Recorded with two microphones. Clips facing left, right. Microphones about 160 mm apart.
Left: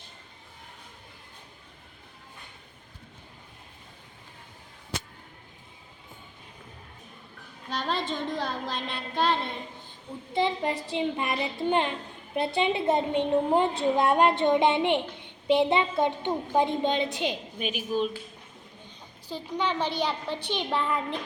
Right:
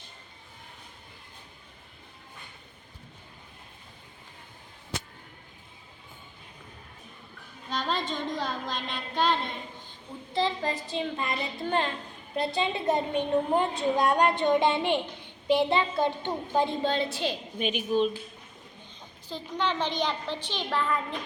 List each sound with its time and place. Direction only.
7.7 s a woman's voice: centre (ahead or behind)
10.3 s a woman's voice: 20° left (ahead or behind)
17.6 s a woman's voice: 5° left (ahead or behind)
19.3 s a child's voice: 10° left (ahead or behind)